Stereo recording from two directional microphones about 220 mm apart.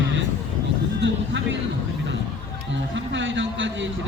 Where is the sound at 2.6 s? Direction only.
55° right (ahead or behind).